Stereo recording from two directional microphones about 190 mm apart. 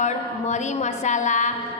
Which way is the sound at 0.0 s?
40° left (ahead or behind).